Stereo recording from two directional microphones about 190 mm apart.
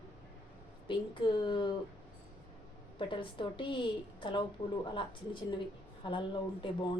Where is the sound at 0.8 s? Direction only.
25° left (ahead or behind).